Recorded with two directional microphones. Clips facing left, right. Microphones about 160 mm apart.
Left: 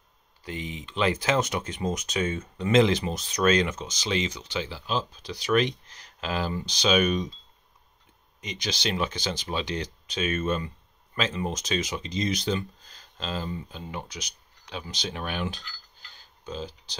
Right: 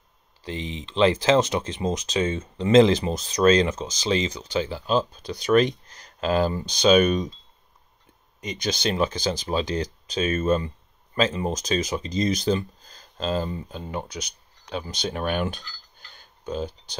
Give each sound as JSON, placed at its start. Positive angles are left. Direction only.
{"t": 0.4, "sound": "speech", "side_deg": -30}
{"t": 8.4, "sound": "speech", "side_deg": -45}
{"t": 16.2, "sound": "a sound", "side_deg": -50}